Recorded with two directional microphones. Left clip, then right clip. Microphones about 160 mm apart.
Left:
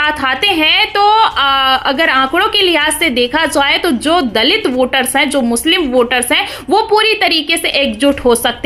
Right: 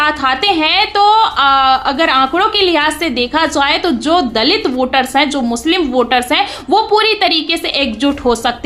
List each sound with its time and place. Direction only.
0.0 s a woman's voice: 20° left (ahead or behind)